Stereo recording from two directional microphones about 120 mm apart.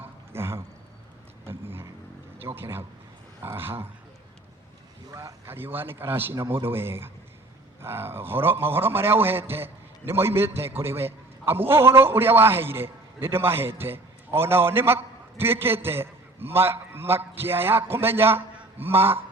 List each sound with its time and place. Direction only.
0.3 s a sound: 20° right (ahead or behind)
1.5 s vehicle: 20° right (ahead or behind)
2.4 s a man's voice: 20° right (ahead or behind)
5.1 s a man's voice: 20° right (ahead or behind)